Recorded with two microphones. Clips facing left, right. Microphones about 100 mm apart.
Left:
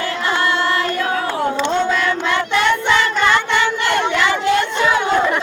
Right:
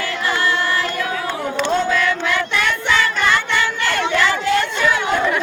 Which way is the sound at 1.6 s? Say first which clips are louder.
Right 3 dB; 25° left (ahead or behind).